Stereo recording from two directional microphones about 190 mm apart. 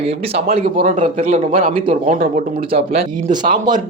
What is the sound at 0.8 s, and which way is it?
Speech, 40° right (ahead or behind).